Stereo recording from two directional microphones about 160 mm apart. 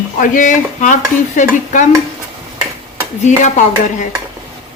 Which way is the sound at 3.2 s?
50° left (ahead or behind).